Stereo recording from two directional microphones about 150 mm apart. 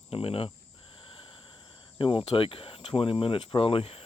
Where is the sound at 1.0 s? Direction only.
35° left (ahead or behind).